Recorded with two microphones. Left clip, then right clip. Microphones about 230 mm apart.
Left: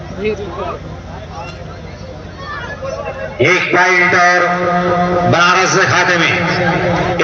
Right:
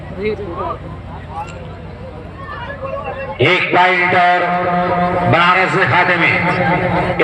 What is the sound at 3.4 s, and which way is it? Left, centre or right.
Speech, right.